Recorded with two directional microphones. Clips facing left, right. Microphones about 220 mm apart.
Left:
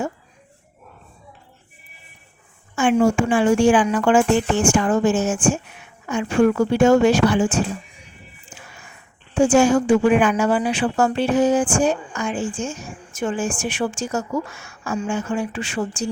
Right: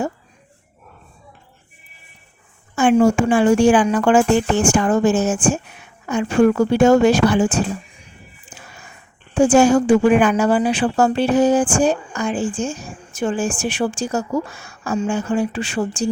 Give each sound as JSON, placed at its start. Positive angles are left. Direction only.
{"t": 2.7, "sound": "a woman's voice", "side_deg": -40}
{"t": 8.5, "sound": "a sound", "side_deg": -40}
{"t": 9.3, "sound": "a woman's voice", "side_deg": -40}